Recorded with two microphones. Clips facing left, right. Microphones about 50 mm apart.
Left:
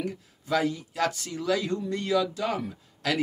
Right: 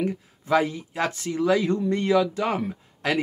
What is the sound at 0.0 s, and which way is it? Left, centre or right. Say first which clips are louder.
Speech: right 6 dB; right.